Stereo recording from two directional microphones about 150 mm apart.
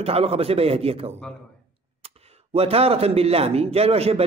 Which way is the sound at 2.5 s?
40° right (ahead or behind).